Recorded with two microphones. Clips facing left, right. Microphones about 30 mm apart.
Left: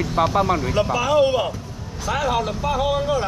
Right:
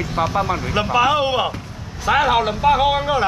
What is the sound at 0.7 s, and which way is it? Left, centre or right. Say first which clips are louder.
Speech: right 2 dB; right.